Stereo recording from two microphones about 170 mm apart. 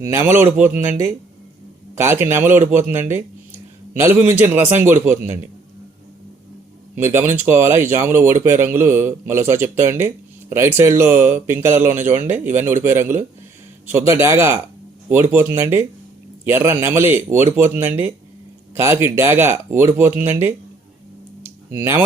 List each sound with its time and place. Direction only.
0.0 s a man's voice: 15° right (ahead or behind)
6.9 s a man's voice: 15° right (ahead or behind)